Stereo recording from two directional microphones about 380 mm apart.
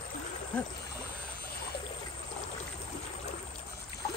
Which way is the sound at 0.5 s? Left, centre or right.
Centre.